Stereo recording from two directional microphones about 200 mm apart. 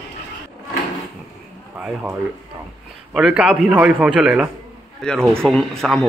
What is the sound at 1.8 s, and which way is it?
A man's voice, 5° right (ahead or behind).